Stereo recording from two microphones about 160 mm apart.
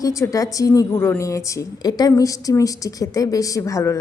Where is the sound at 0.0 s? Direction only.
20° left (ahead or behind).